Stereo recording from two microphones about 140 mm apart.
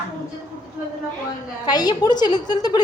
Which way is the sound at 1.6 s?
30° left (ahead or behind).